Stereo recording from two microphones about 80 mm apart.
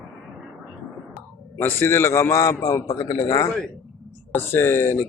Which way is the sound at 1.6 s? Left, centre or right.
Left.